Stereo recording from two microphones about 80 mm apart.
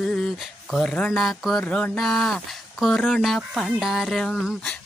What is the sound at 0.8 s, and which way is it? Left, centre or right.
Speech, centre.